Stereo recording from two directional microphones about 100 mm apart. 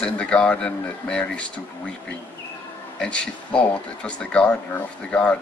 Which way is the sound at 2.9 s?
10° left (ahead or behind).